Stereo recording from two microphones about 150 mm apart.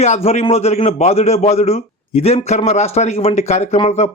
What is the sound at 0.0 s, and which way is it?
Speech, 45° left (ahead or behind).